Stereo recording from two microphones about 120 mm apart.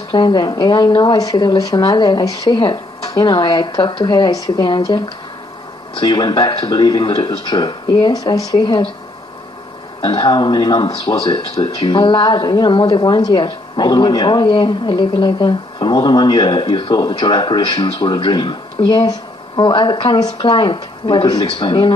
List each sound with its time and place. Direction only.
0.1 s speech: 40° left (ahead or behind)
10.0 s speech: 40° left (ahead or behind)